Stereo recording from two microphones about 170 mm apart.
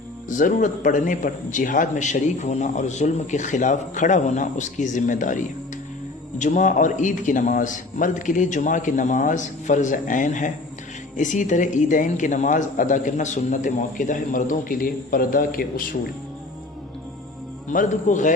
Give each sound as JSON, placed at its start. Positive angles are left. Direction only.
{"t": 0.3, "sound": "a man's voice", "side_deg": 50}
{"t": 6.4, "sound": "a man's voice", "side_deg": 45}
{"t": 17.7, "sound": "a man's voice", "side_deg": 45}